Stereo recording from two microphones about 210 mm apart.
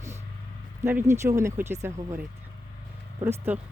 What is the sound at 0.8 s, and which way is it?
Speech, 10° right (ahead or behind).